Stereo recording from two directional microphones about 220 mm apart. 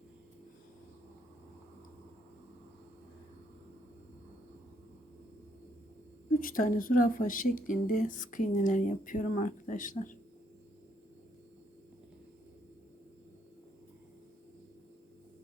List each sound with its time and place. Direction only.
6.4 s speech: 40° left (ahead or behind)